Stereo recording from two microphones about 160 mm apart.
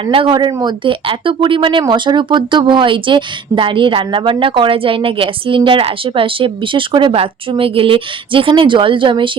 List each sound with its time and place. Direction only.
0.0 s speech: 30° right (ahead or behind)